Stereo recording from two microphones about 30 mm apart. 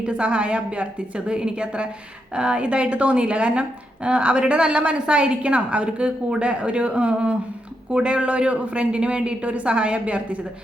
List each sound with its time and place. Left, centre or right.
0.0 s a woman's voice: right
1.3 s a man's voice: right